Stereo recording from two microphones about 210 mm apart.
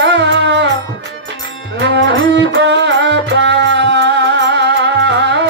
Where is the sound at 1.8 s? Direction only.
55° right (ahead or behind).